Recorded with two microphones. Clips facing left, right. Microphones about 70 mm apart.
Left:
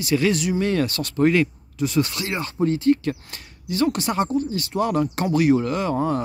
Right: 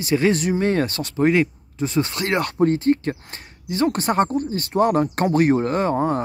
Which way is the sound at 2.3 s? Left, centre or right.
Right.